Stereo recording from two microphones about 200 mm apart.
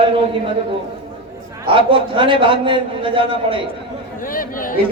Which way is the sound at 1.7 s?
25° right (ahead or behind).